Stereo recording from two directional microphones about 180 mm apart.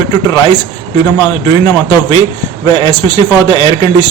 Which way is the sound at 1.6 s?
25° left (ahead or behind).